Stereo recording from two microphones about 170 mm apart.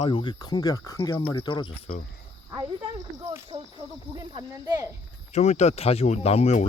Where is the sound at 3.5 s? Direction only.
40° right (ahead or behind).